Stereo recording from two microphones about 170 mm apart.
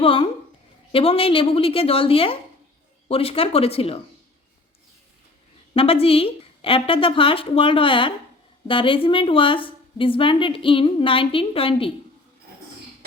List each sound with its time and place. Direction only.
0.0 s a woman's voice: 30° left (ahead or behind)
5.7 s a woman's voice: 35° left (ahead or behind)